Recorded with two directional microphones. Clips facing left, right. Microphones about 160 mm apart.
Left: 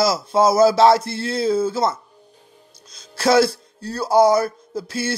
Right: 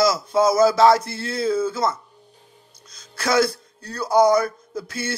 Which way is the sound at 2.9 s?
30° left (ahead or behind).